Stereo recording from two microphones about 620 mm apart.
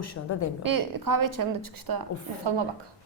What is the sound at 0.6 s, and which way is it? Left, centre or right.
A woman's voice, right.